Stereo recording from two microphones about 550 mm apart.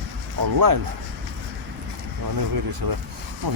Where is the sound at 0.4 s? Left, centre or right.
Right.